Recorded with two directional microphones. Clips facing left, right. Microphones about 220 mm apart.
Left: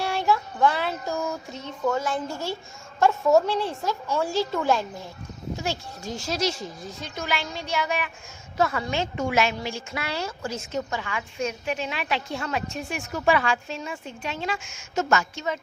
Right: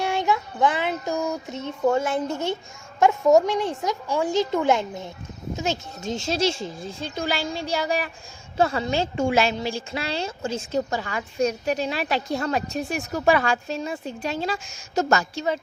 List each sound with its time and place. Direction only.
0.0 s child singing: 20° right (ahead or behind)
1.8 s a woman's voice: 25° right (ahead or behind)